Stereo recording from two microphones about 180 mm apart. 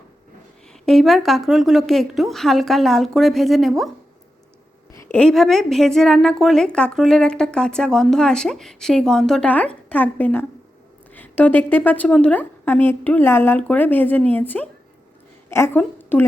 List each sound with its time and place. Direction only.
0.7 s a woman's voice: centre (ahead or behind)
5.1 s a woman's voice: 5° left (ahead or behind)